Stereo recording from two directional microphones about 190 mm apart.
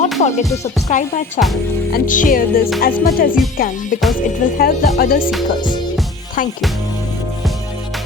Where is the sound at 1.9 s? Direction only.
45° left (ahead or behind).